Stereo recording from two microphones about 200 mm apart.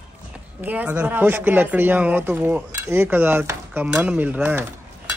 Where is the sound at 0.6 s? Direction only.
10° right (ahead or behind).